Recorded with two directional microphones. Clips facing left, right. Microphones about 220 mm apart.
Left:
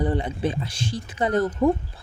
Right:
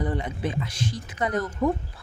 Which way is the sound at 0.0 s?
30° left (ahead or behind).